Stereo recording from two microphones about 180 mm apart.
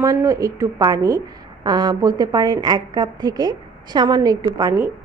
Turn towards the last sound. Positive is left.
turn(degrees=-15)  # may be behind; listen again after turning